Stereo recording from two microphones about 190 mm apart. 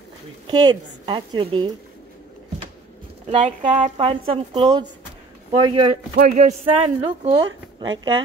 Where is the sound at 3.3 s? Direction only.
30° right (ahead or behind).